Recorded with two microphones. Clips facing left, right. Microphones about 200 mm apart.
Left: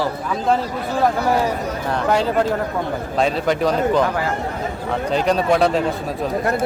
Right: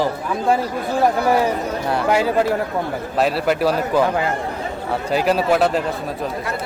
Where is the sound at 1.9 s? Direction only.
10° right (ahead or behind).